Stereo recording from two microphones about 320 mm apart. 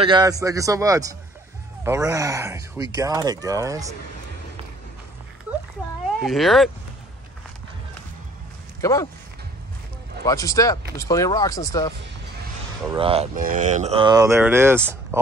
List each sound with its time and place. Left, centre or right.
0.0 s speech: centre
6.2 s speech: centre
8.8 s speech: centre
10.2 s speech: centre
12.9 s speech: centre